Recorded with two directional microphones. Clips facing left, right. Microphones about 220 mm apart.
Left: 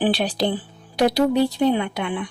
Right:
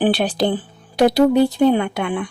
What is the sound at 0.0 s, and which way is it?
Speech, 50° right (ahead or behind).